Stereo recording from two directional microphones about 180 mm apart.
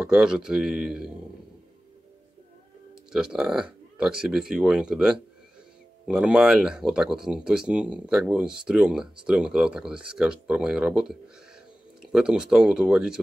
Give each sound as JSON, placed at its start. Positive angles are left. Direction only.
{"t": 0.0, "sound": "speech", "side_deg": -5}
{"t": 2.9, "sound": "speech", "side_deg": -5}